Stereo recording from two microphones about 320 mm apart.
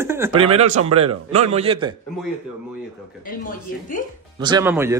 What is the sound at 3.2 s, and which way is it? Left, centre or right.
Speech, left.